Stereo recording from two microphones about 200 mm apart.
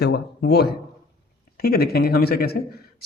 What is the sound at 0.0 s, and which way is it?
Speech, 55° left (ahead or behind).